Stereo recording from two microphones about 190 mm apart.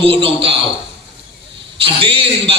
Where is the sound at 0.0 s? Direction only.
30° right (ahead or behind).